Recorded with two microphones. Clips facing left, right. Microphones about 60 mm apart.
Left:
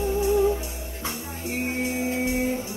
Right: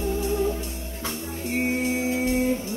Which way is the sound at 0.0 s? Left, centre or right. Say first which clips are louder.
Left 3 dB; centre.